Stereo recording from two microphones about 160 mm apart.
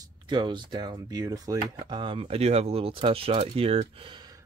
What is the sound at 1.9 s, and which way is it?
Speech, 30° right (ahead or behind).